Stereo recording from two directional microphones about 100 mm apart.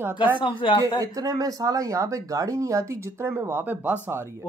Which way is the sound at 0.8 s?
35° right (ahead or behind).